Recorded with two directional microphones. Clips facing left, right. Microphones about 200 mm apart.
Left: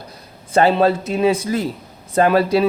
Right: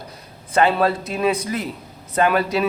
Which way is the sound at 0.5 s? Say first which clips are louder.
Left 3 dB; 30° left (ahead or behind).